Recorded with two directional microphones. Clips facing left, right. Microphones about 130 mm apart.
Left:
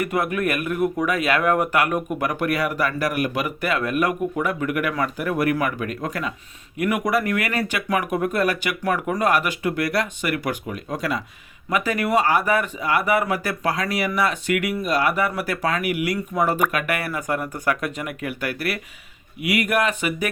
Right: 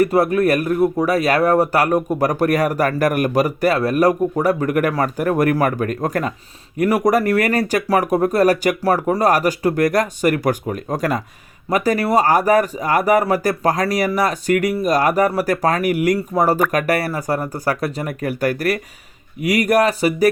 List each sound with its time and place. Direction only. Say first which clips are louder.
0.0 s speech: right 8 dB; 35° right (ahead or behind)